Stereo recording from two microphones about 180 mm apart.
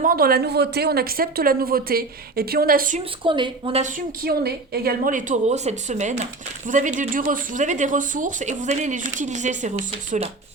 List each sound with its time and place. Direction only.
0.0 s speech: 55° right (ahead or behind)
3.0 s a woman's voice: 25° right (ahead or behind)